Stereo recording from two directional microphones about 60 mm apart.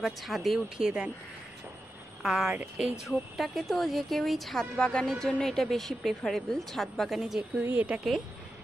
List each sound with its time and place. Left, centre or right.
0.0 s a woman's voice: centre
0.7 s speech: centre
2.2 s a woman's voice: centre
4.7 s a woman's voice: centre
7.6 s speech: right